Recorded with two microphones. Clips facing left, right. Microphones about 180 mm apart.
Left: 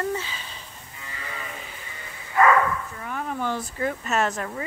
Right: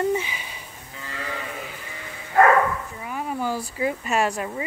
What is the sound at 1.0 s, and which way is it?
Sheep, 90° right.